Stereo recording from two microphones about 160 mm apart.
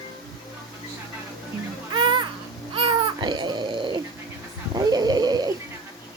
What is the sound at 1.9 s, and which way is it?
Children playing, 30° right (ahead or behind).